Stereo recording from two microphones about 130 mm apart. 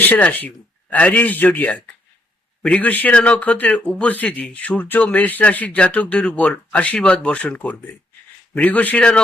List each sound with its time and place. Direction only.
0.0 s a man's voice: 10° left (ahead or behind)